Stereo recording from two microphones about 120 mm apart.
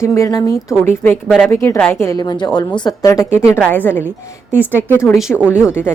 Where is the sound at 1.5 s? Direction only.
20° left (ahead or behind).